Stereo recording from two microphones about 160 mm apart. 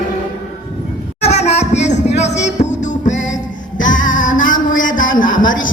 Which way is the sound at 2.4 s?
45° left (ahead or behind).